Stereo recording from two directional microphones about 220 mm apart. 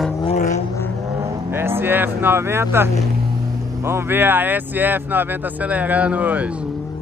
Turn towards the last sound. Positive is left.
turn(degrees=-5)  # may be behind; listen again after turning